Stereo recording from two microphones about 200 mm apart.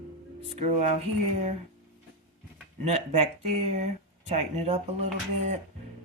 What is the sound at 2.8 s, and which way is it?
Speech, 30° right (ahead or behind).